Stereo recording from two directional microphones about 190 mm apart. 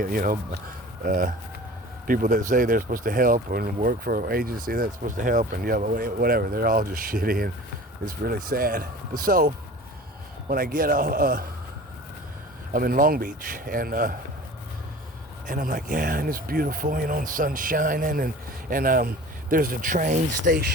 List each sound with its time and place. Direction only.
0.0 s speech: 50° right (ahead or behind)
10.5 s speech: 50° right (ahead or behind)
12.7 s speech: 45° right (ahead or behind)
15.4 s speech: 45° right (ahead or behind)